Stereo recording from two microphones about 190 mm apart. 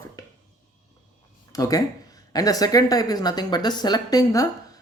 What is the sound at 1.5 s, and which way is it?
Speech, 20° left (ahead or behind).